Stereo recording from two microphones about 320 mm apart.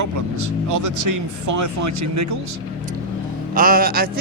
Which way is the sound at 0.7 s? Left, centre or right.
Right.